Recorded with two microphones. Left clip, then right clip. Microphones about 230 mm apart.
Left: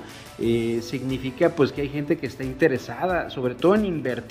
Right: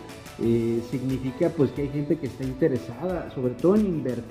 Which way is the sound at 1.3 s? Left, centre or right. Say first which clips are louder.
Left 4 dB; centre.